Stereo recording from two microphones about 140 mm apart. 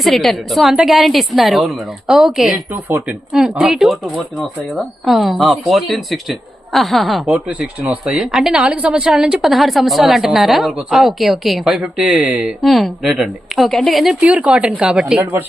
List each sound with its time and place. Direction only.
0.0 s speech: centre (ahead or behind)
2.7 s speech: 15° right (ahead or behind)
3.3 s speech: 5° right (ahead or behind)
15.2 s speech: 15° right (ahead or behind)